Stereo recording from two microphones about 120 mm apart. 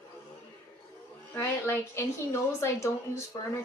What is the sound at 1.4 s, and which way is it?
A woman's voice, 20° left (ahead or behind).